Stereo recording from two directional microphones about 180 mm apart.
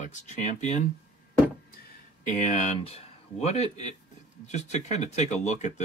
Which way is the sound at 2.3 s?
40° left (ahead or behind).